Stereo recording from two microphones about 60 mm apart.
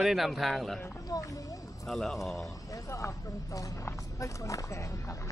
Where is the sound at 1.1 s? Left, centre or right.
Left.